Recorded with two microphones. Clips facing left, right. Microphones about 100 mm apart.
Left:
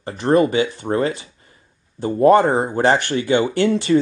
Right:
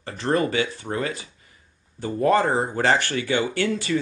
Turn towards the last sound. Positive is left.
turn(degrees=30)  # may be behind; listen again after turning